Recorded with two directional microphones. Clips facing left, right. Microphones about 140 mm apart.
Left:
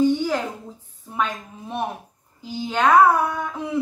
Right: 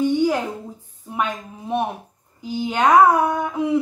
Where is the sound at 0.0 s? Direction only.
15° right (ahead or behind).